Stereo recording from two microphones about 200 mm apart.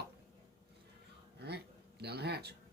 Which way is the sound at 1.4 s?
55° right (ahead or behind).